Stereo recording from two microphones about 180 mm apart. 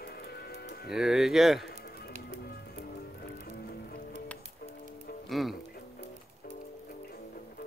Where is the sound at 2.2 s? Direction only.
60° left (ahead or behind).